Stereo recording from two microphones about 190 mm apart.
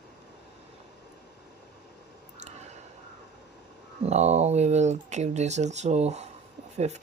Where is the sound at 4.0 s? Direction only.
35° right (ahead or behind).